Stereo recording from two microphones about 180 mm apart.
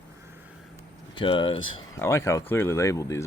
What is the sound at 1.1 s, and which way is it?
Speech, 25° left (ahead or behind).